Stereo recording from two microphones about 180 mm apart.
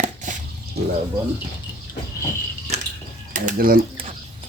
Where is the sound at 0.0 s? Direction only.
45° right (ahead or behind).